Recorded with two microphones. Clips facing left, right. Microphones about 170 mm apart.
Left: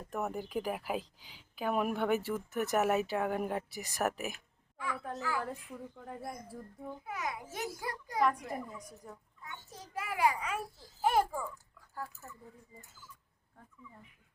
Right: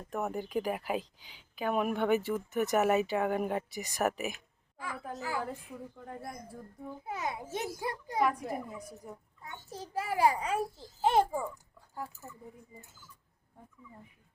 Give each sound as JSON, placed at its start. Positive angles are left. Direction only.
{"t": 0.1, "sound": "speech", "side_deg": 0}
{"t": 7.0, "sound": "a child's voice", "side_deg": -30}
{"t": 8.2, "sound": "speech", "side_deg": -5}
{"t": 9.4, "sound": "a child's voice", "side_deg": -30}